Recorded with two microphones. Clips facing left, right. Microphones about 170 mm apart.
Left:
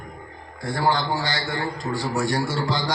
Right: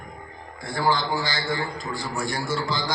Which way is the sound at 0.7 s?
55° left (ahead or behind).